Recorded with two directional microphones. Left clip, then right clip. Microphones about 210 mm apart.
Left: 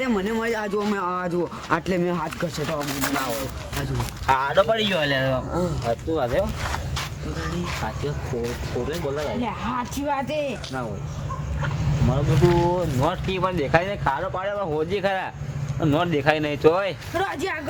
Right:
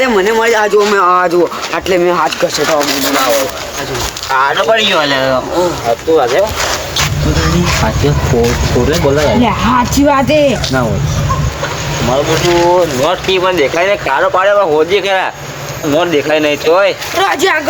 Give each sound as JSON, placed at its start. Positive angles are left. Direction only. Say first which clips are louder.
{"t": 0.0, "sound": "speech", "louder": "right 15 dB", "side_deg": 0}
{"t": 4.4, "sound": "speech", "louder": "right 13 dB", "side_deg": 15}
{"t": 8.4, "sound": "speech", "louder": "right 16 dB", "side_deg": 0}
{"t": 10.5, "sound": "speech", "louder": "right 17 dB", "side_deg": -5}
{"t": 12.5, "sound": "speech", "louder": "right 12 dB", "side_deg": 0}
{"t": 17.2, "sound": "speech", "louder": "right 15 dB", "side_deg": -15}